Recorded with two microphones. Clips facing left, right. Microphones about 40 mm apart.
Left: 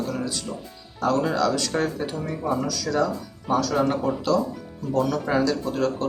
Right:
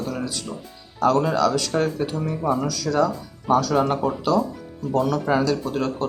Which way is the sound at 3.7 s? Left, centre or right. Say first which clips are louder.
Right 2 dB; right.